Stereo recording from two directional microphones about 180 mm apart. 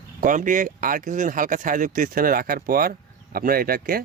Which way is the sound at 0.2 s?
45° right (ahead or behind).